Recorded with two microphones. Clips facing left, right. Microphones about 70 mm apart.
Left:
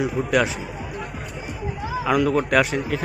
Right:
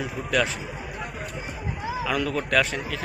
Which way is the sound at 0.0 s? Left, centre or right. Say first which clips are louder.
Left 5 dB; centre.